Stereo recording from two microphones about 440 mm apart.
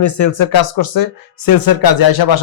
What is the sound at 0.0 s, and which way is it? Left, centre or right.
Speech, left.